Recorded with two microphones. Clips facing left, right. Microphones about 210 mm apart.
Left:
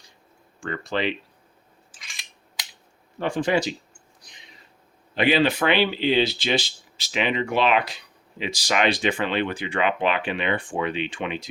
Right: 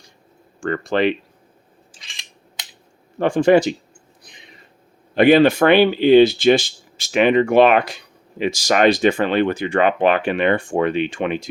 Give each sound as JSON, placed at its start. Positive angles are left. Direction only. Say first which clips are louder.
{"t": 0.6, "sound": "speech", "louder": "right 8 dB", "side_deg": -50}
{"t": 3.2, "sound": "speech", "louder": "right 9 dB", "side_deg": -50}
{"t": 4.2, "sound": "a sound", "louder": "right 6 dB", "side_deg": -55}
{"t": 5.1, "sound": "speech", "louder": "right 8 dB", "side_deg": -50}